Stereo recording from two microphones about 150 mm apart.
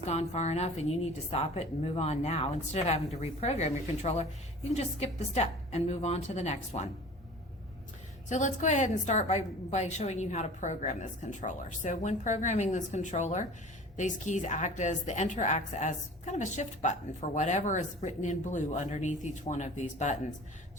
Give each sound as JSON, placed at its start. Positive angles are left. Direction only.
{"t": 0.0, "sound": "a woman's voice", "side_deg": 45}
{"t": 8.3, "sound": "a woman's voice", "side_deg": 55}